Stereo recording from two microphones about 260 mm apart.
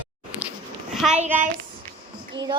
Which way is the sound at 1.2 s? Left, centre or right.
Right.